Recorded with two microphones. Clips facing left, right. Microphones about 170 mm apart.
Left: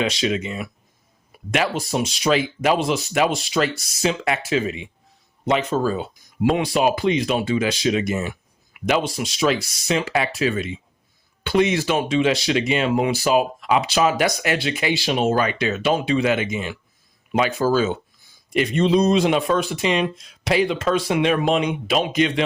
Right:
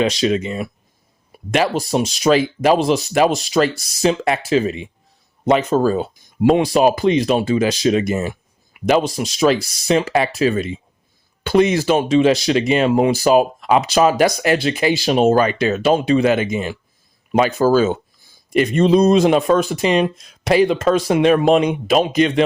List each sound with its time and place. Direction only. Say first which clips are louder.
0.0 s speech: right 5 dB; 40° right (ahead or behind)